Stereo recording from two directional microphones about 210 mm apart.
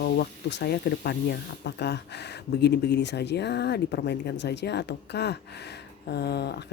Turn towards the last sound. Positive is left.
turn(degrees=50)  # may be behind; listen again after turning